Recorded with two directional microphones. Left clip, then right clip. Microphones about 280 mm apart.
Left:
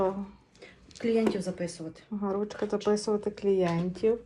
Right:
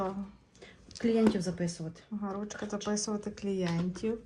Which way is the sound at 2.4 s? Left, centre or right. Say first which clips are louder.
Left 8 dB; centre.